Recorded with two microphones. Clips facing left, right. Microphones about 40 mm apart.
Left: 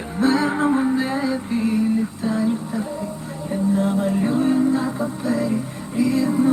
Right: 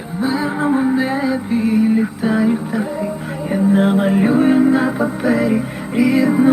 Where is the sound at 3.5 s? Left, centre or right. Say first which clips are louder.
Right 6 dB; right.